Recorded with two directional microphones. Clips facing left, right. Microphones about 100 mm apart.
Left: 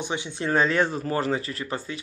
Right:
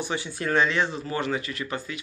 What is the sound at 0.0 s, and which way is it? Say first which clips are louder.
Speech: even; 20° left (ahead or behind).